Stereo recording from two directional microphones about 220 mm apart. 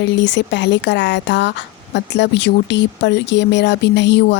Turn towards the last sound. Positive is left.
turn(degrees=50)  # may be behind; listen again after turning